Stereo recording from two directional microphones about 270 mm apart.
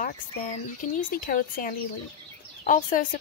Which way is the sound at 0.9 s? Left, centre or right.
Left.